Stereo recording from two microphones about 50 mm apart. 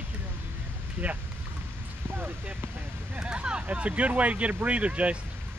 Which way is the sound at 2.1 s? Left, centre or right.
Right.